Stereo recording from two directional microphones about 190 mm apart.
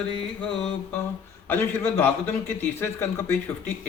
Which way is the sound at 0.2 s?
5° left (ahead or behind).